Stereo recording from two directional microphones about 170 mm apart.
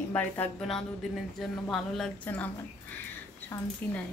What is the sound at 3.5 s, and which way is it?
Speech, 15° left (ahead or behind).